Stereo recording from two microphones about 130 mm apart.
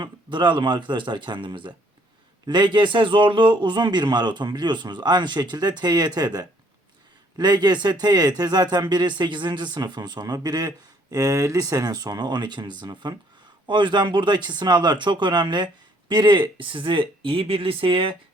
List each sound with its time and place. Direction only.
0.0 s speech: 35° right (ahead or behind)